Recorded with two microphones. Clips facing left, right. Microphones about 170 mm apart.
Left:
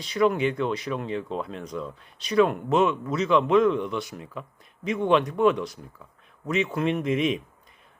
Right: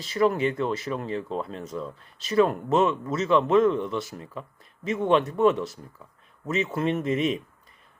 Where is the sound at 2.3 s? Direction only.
40° right (ahead or behind).